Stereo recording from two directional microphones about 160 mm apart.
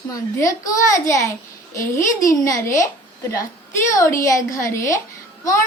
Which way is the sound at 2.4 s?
20° left (ahead or behind).